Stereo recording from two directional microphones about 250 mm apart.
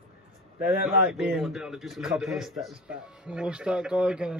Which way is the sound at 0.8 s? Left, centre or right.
Centre.